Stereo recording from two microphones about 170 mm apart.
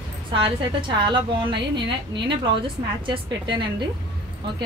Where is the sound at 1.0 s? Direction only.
30° right (ahead or behind).